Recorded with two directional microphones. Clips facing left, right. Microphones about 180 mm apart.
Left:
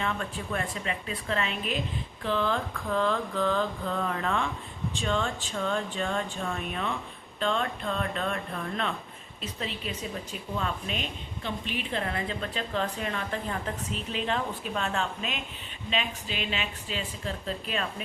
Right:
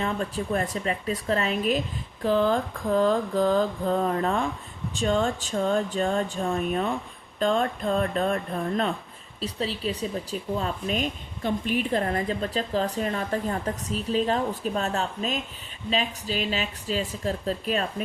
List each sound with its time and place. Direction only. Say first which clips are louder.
0.0 s a woman's voice: right 4 dB; 35° right (ahead or behind)